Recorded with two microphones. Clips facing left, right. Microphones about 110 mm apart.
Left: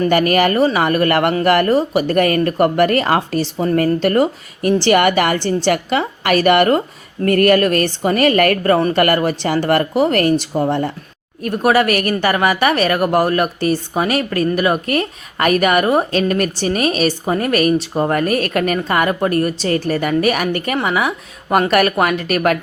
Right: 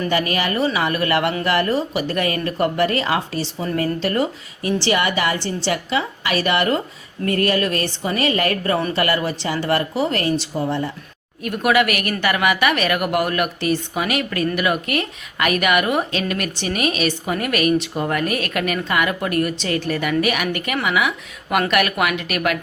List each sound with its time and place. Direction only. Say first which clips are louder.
0.1 s speech: left 7 dB; 55° left (ahead or behind)
7.3 s a sound: left 7 dB; 55° left (ahead or behind)
8.0 s speech: left 7 dB; 50° left (ahead or behind)
11.4 s a woman's voice: left 4 dB; 35° left (ahead or behind)